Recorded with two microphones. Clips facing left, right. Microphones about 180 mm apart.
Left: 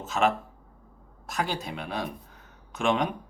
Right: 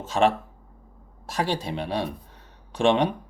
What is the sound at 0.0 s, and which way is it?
Speech, 30° right (ahead or behind).